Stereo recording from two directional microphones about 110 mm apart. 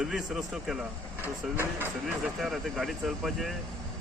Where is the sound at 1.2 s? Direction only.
20° right (ahead or behind).